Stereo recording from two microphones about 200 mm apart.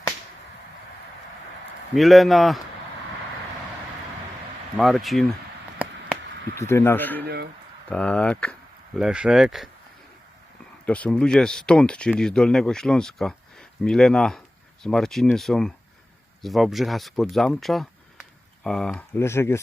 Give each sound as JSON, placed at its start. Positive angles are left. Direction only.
{"t": 2.0, "sound": "speech", "side_deg": 0}
{"t": 4.8, "sound": "speech", "side_deg": 0}
{"t": 5.8, "sound": "a sound", "side_deg": -5}
{"t": 6.6, "sound": "speech", "side_deg": 15}
{"t": 10.8, "sound": "speech", "side_deg": 5}